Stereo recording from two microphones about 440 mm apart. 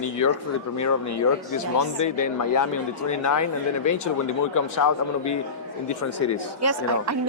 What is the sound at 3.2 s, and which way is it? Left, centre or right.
Speech, left.